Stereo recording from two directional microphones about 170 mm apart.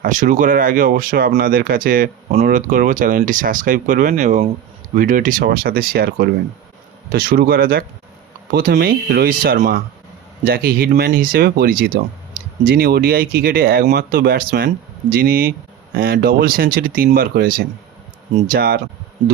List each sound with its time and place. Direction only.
0.0 s speech: 50° right (ahead or behind)
2.3 s speech: 45° right (ahead or behind); by 18.8 s 60° right (ahead or behind)